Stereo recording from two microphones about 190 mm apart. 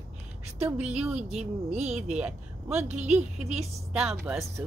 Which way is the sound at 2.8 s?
40° right (ahead or behind).